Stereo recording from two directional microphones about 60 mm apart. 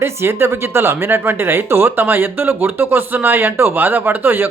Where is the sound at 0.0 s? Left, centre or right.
Right.